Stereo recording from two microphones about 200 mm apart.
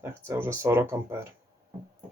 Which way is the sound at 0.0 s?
10° right (ahead or behind).